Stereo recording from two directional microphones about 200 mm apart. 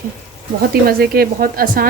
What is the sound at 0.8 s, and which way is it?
Speech, 50° right (ahead or behind).